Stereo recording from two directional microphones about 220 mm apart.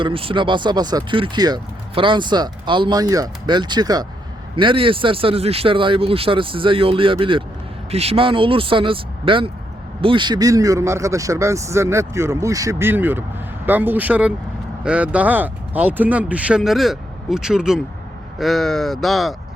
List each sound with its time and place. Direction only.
0.0 s a man's voice: 25° right (ahead or behind); by 19.4 s centre (ahead or behind)